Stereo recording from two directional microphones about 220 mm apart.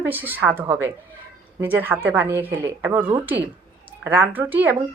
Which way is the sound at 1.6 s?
10° right (ahead or behind).